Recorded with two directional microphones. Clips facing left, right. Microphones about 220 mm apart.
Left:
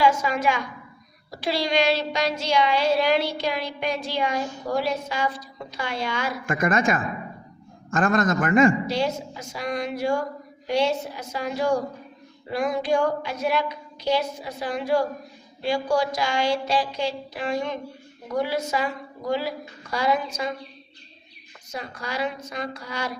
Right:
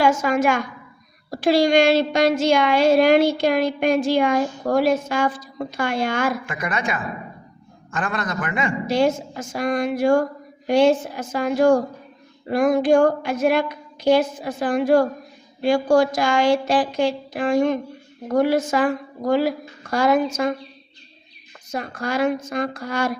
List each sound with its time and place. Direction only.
0.0 s speech: 50° right (ahead or behind)
6.4 s a man's voice: 45° left (ahead or behind)
8.9 s speech: 50° right (ahead or behind)
21.7 s speech: 50° right (ahead or behind)